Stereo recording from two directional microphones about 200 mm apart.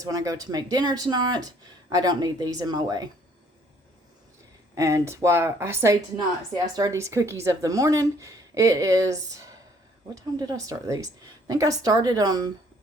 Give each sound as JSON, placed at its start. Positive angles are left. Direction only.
{"t": 0.0, "sound": "speech", "side_deg": -15}
{"t": 4.7, "sound": "a woman's voice", "side_deg": -15}